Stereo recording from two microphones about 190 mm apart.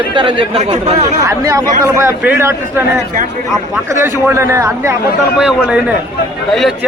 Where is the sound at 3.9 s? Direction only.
15° right (ahead or behind).